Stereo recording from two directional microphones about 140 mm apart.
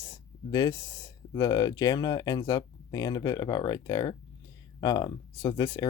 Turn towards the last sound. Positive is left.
turn(degrees=30)  # may be behind; listen again after turning